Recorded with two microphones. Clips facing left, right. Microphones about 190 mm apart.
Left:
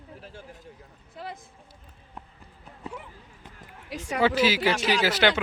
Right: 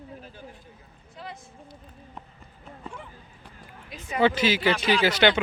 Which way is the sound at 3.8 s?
80° left.